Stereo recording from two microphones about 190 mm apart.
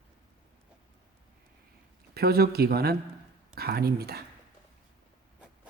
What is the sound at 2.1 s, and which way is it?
Speech, 55° right (ahead or behind).